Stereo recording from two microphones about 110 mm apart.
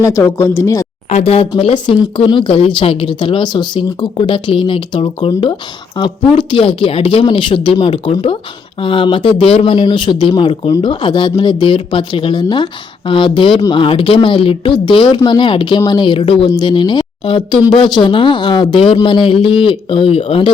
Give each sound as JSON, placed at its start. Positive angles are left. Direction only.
{"t": 0.0, "sound": "speech", "side_deg": 30}
{"t": 1.1, "sound": "speech", "side_deg": 65}
{"t": 9.7, "sound": "speech", "side_deg": 45}